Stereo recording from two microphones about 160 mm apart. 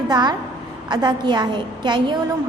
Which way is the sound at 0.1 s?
25° right (ahead or behind).